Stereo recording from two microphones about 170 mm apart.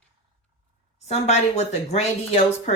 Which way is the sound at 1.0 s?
40° left (ahead or behind).